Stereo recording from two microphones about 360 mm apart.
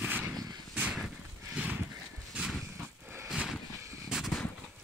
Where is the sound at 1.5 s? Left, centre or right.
Centre.